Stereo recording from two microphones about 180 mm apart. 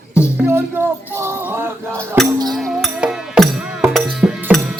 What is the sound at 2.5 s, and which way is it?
Music, centre (ahead or behind).